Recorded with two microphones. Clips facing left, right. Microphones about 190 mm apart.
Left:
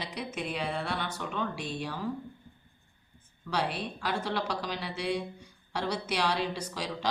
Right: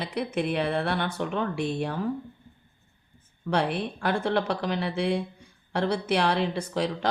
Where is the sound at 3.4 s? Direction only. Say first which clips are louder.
Right 6 dB; 55° right (ahead or behind).